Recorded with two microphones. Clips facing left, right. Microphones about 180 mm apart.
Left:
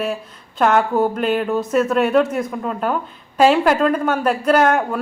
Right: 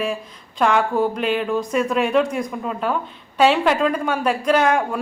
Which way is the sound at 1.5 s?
5° left (ahead or behind).